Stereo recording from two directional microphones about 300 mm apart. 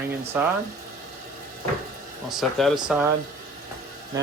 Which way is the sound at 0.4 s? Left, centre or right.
Centre.